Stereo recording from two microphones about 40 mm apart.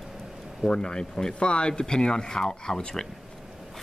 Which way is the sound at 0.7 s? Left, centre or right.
Left.